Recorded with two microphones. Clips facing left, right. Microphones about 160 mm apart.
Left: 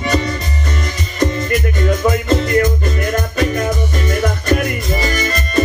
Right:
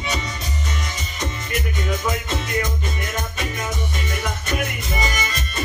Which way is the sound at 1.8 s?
65° left (ahead or behind).